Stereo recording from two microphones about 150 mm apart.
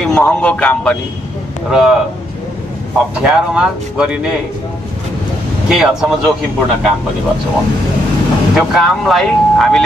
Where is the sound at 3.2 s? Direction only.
5° right (ahead or behind).